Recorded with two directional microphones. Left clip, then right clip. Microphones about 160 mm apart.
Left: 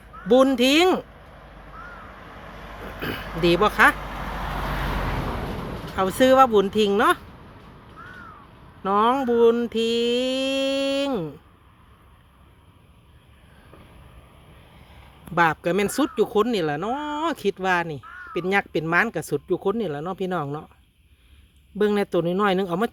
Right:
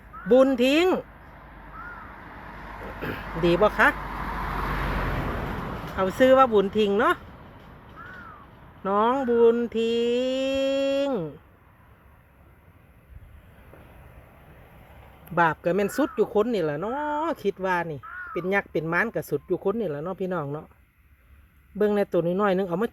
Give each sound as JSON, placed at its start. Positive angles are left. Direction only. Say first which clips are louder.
{"t": 0.3, "sound": "speech", "louder": "left 1 dB", "side_deg": 5}
{"t": 1.2, "sound": "vehicle", "louder": "left 1 dB", "side_deg": 55}
{"t": 3.2, "sound": "a sound", "louder": "left 1 dB", "side_deg": 60}
{"t": 3.4, "sound": "speech", "louder": "left 3 dB", "side_deg": 10}
{"t": 3.9, "sound": "vehicle", "louder": "even", "side_deg": 65}
{"t": 6.0, "sound": "speech", "louder": "left 2 dB", "side_deg": 10}
{"t": 8.8, "sound": "speech", "louder": "left 3 dB", "side_deg": 10}
{"t": 15.4, "sound": "speech", "louder": "left 2 dB", "side_deg": 10}
{"t": 21.8, "sound": "speech", "louder": "left 1 dB", "side_deg": 10}